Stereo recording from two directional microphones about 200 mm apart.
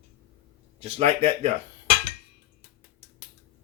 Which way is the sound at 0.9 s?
30° right (ahead or behind).